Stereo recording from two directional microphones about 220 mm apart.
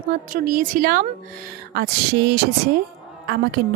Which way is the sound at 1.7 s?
45° right (ahead or behind).